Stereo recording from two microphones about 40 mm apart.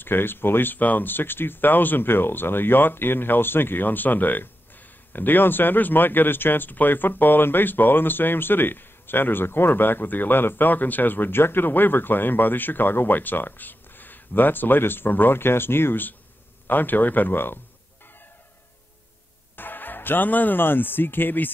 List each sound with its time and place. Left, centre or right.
0.0 s speech: left
0.7 s speech: left
16.6 s speech: left
19.5 s speech: left